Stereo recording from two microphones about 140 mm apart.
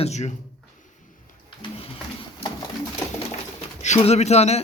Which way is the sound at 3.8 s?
50° left (ahead or behind).